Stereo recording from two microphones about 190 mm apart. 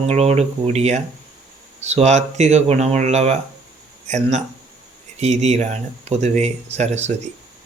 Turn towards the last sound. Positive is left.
turn(degrees=-35)  # may be behind; listen again after turning